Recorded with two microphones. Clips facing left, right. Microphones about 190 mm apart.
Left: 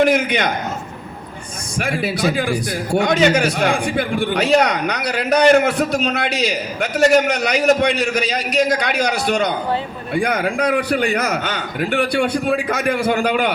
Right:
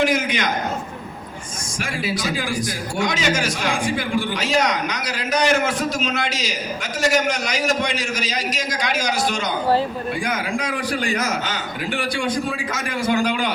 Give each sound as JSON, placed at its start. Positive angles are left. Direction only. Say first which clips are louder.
{"t": 0.0, "sound": "a man's voice", "louder": "left 5 dB", "side_deg": 60}
{"t": 1.8, "sound": "a man's voice", "louder": "left 6 dB", "side_deg": 60}